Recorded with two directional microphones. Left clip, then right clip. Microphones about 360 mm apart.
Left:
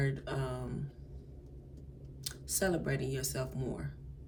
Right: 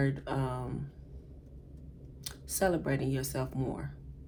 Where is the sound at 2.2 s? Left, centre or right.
Centre.